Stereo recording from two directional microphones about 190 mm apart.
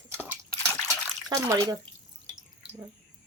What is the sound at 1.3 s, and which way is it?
Speech, 20° right (ahead or behind).